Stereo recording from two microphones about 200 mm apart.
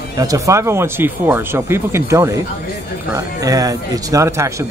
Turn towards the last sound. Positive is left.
turn(degrees=-15)  # may be behind; listen again after turning